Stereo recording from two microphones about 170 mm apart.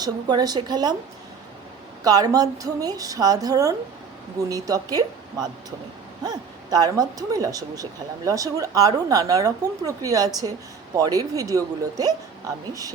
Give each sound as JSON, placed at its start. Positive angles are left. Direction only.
{"t": 0.0, "sound": "speech", "side_deg": -25}
{"t": 2.0, "sound": "speech", "side_deg": -20}